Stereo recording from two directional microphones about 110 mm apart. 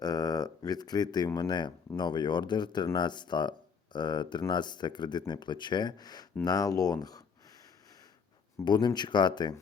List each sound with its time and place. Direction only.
0.0 s speech: 35° left (ahead or behind)
8.6 s speech: 40° left (ahead or behind)